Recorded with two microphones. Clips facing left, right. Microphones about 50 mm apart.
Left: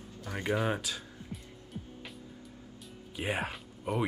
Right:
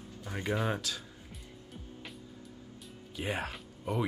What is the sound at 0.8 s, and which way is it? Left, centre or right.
Speech, centre.